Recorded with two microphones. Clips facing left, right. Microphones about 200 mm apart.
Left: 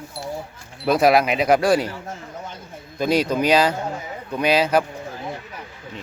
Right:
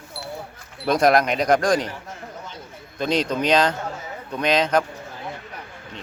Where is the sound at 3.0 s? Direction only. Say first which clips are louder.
Left 3 dB; 10° left (ahead or behind).